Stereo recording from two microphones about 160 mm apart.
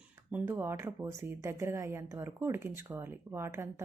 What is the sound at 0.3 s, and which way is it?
A woman's voice, 10° right (ahead or behind).